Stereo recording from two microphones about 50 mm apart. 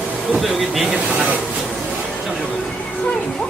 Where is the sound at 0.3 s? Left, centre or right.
Centre.